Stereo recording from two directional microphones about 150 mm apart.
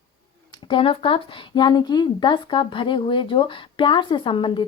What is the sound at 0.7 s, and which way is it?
Speech, 35° left (ahead or behind).